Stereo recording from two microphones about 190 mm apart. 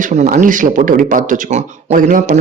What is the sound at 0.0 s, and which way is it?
Speech, 40° right (ahead or behind).